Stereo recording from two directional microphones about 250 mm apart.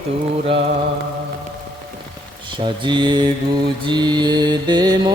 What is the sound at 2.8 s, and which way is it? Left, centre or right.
Mantra, centre.